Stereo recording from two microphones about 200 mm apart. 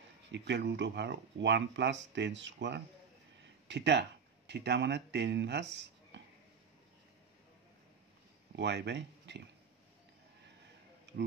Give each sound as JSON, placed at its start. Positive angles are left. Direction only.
{"t": 0.3, "sound": "speech", "side_deg": -60}
{"t": 8.5, "sound": "speech", "side_deg": -60}
{"t": 11.1, "sound": "a sound", "side_deg": -60}